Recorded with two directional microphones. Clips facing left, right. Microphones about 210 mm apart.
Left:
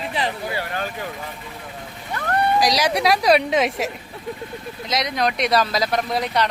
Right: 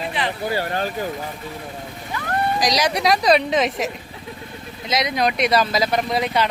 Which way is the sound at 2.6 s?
5° left (ahead or behind).